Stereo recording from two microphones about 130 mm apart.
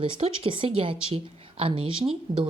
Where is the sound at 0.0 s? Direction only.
45° right (ahead or behind).